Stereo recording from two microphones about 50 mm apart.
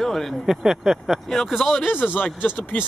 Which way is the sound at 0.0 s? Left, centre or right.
Centre.